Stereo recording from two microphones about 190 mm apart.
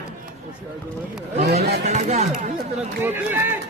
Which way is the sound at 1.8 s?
35° right (ahead or behind).